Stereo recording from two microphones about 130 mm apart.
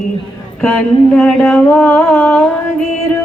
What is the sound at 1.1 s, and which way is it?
Speech, 5° left (ahead or behind).